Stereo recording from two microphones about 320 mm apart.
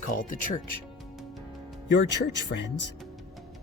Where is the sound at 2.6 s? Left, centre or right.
Left.